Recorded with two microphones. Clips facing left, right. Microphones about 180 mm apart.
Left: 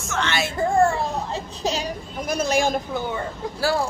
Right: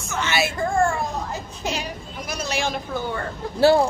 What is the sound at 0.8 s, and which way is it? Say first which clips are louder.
Children playing: left 2 dB; 30° left (ahead or behind).